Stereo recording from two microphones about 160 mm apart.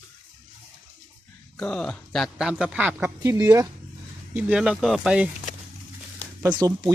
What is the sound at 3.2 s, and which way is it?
Speech, 20° right (ahead or behind).